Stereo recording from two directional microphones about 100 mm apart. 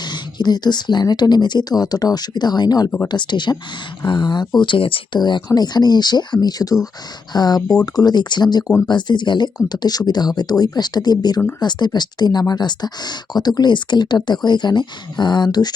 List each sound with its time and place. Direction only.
0.0 s speech: 45° left (ahead or behind)